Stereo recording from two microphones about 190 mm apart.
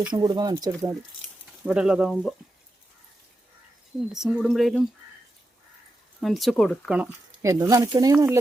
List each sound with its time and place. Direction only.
0.1 s speech: 20° right (ahead or behind)
1.6 s speech: 5° right (ahead or behind)
4.1 s speech: centre (ahead or behind)
6.1 s speech: centre (ahead or behind)
7.4 s speech: 15° right (ahead or behind)